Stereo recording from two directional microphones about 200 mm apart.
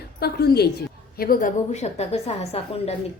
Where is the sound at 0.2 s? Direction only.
50° left (ahead or behind).